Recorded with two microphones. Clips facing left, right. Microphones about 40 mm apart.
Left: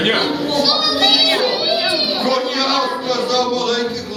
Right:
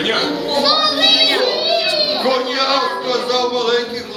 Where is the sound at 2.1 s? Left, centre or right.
Centre.